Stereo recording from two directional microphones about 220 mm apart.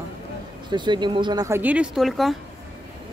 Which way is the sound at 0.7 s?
20° right (ahead or behind).